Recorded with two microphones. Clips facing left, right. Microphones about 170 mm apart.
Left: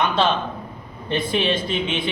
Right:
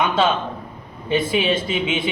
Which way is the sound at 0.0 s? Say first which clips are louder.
Right 1 dB; 5° right (ahead or behind).